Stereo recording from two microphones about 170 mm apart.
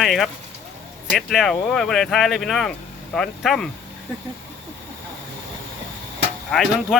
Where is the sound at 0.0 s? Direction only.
Centre (ahead or behind).